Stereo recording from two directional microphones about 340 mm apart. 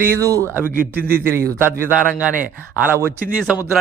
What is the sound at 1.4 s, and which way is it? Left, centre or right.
A man's voice, centre.